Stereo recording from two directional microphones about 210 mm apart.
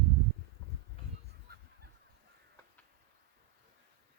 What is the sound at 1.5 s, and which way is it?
Goose, 45° right (ahead or behind).